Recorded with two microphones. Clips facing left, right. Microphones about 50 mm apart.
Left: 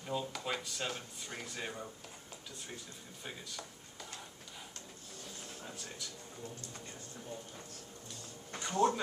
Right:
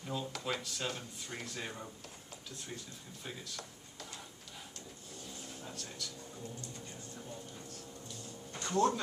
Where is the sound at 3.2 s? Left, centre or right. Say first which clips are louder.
Even; centre.